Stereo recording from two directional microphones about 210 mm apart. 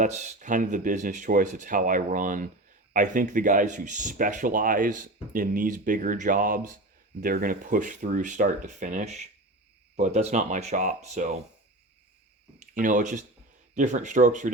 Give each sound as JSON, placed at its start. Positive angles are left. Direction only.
{"t": 0.0, "sound": "speech", "side_deg": -35}
{"t": 12.5, "sound": "speech", "side_deg": -40}